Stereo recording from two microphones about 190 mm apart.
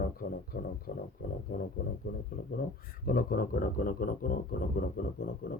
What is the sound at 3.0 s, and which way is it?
Speech, 50° left (ahead or behind).